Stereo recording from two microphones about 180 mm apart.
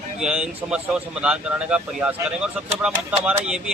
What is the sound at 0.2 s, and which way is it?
A man's voice, 5° right (ahead or behind).